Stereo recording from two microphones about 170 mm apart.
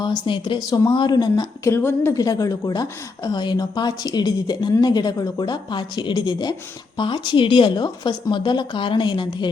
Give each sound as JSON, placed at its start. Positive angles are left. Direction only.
{"t": 0.0, "sound": "speech", "side_deg": 25}